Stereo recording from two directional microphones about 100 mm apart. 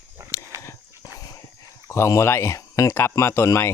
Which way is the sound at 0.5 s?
30° right (ahead or behind).